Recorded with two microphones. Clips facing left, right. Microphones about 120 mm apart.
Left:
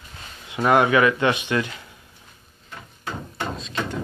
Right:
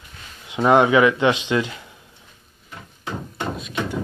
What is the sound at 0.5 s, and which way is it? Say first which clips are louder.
A man's voice: right 3 dB; 20° right (ahead or behind).